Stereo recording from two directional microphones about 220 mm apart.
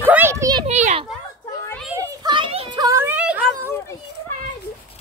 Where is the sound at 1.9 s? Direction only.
15° right (ahead or behind).